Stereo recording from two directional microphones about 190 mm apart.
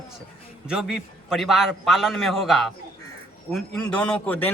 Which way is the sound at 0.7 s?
5° right (ahead or behind).